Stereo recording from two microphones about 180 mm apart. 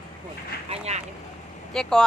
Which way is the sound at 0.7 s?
35° right (ahead or behind).